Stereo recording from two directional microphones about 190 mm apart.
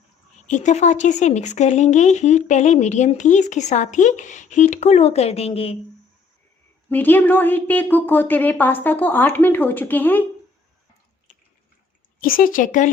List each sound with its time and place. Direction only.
0.4 s speech: 40° left (ahead or behind)
6.8 s a woman's voice: 10° left (ahead or behind)
12.2 s speech: 45° left (ahead or behind)